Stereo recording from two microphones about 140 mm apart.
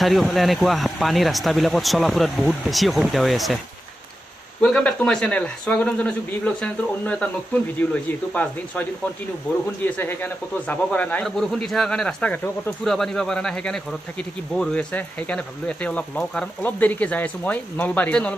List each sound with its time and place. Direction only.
0.0 s speech: centre (ahead or behind)
4.6 s speech: 5° left (ahead or behind)
8.3 s speech: 10° left (ahead or behind)
9.8 s speech: 10° left (ahead or behind)